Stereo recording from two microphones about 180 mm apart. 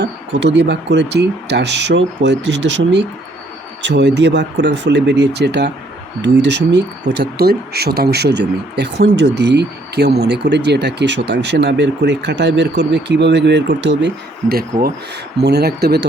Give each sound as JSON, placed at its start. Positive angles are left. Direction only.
{"t": 0.0, "sound": "speech", "side_deg": -80}
{"t": 14.5, "sound": "speech", "side_deg": -55}